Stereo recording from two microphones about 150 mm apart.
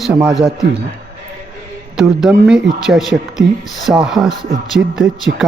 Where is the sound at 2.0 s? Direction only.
5° right (ahead or behind).